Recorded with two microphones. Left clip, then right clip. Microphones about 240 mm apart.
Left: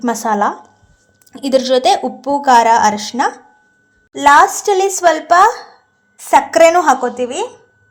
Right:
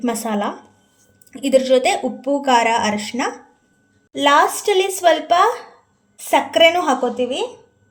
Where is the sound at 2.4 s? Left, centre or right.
Left.